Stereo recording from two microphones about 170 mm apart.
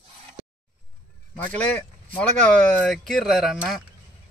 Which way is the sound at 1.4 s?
10° left (ahead or behind).